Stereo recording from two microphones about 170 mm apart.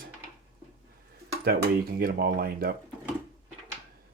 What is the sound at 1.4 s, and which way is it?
Speech, 60° right (ahead or behind).